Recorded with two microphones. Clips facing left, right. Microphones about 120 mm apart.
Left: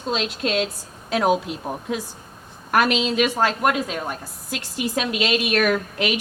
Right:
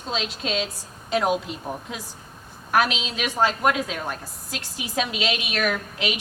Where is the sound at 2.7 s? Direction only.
55° left (ahead or behind).